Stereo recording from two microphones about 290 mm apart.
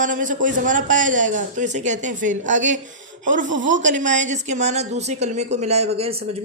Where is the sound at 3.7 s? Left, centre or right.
Right.